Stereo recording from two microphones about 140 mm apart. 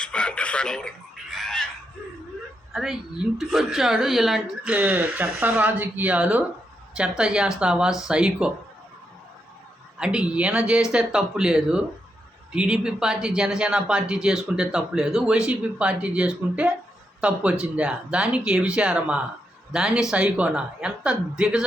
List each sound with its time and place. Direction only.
0.0 s a sound: 5° left (ahead or behind)
2.7 s speech: 5° right (ahead or behind)
10.0 s speech: 10° right (ahead or behind)